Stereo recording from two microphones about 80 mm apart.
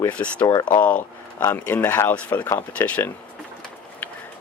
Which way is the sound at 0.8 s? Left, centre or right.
Centre.